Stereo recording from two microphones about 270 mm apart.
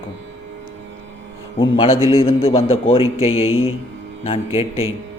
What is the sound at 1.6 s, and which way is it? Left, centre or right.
A man's voice, centre.